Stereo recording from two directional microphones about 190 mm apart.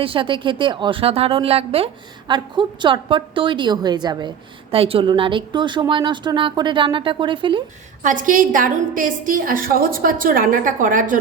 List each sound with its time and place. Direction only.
0.0 s a woman's voice: 25° right (ahead or behind)
8.0 s a woman's voice: 45° right (ahead or behind)